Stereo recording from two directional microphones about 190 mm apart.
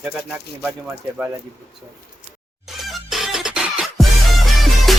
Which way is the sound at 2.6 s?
Centre (ahead or behind).